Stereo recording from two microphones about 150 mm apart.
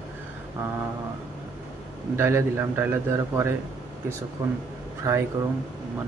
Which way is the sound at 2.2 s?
15° right (ahead or behind).